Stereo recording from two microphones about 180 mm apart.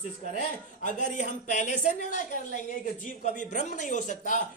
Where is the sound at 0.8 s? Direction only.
45° left (ahead or behind).